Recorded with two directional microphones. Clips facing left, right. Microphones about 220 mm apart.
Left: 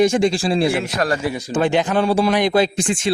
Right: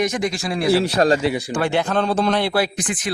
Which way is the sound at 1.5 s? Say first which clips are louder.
Left 7 dB; 20° left (ahead or behind).